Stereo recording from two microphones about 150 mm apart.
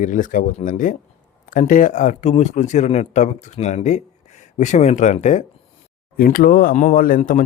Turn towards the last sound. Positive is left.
turn(degrees=60)  # may be behind; listen again after turning